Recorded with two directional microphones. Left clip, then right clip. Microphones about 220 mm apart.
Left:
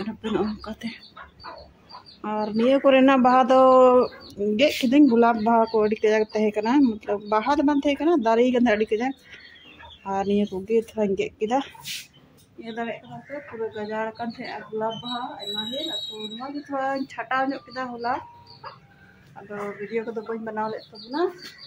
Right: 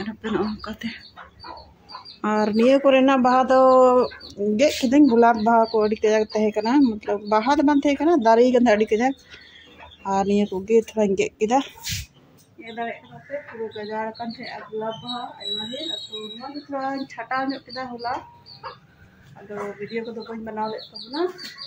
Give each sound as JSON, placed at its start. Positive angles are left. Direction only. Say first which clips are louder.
{"t": 0.0, "sound": "speech", "louder": "right 1 dB", "side_deg": 0}
{"t": 2.2, "sound": "speech", "louder": "right 6 dB", "side_deg": -20}
{"t": 2.5, "sound": "speech", "louder": "right 1 dB", "side_deg": -5}
{"t": 12.6, "sound": "speech", "louder": "right 1 dB", "side_deg": 5}
{"t": 16.7, "sound": "speech", "louder": "left 1 dB", "side_deg": 0}
{"t": 19.9, "sound": "speech", "louder": "left 2 dB", "side_deg": 10}